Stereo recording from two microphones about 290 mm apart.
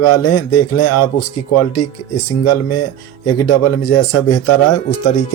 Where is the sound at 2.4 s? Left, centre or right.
Left.